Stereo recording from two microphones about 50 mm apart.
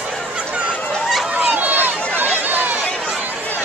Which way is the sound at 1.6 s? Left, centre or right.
Right.